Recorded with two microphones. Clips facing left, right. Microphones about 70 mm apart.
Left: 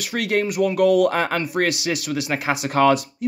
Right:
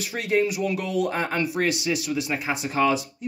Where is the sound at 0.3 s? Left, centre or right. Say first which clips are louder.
Left 2 dB; left.